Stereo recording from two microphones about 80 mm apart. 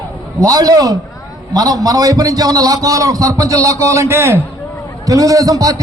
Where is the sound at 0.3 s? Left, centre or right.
Right.